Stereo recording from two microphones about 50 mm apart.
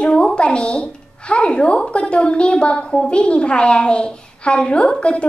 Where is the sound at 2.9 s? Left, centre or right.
Centre.